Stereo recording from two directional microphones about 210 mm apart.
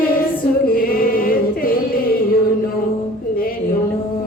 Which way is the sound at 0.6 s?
45° left (ahead or behind).